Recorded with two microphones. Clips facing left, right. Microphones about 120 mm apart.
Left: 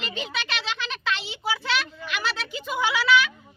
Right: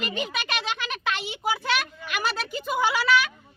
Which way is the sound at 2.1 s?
45° right (ahead or behind).